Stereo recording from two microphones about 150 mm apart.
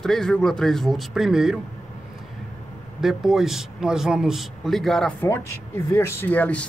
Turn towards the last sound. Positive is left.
turn(degrees=10)  # may be behind; listen again after turning